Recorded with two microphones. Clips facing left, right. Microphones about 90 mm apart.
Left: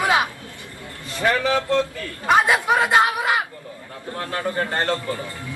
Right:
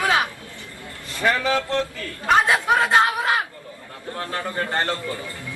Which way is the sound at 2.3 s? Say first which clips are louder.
Left 1 dB; 10° left (ahead or behind).